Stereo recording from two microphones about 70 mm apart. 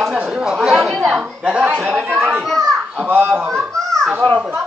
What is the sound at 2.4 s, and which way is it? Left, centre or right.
Children playing, centre.